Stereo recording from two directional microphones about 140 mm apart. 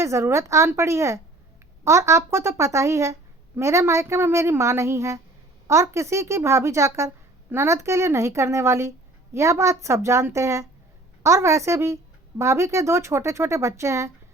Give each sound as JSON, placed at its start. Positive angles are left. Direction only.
{"t": 0.0, "sound": "a woman's voice", "side_deg": -20}